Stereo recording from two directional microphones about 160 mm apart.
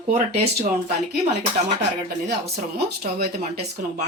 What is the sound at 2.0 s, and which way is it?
Speech, 75° right (ahead or behind).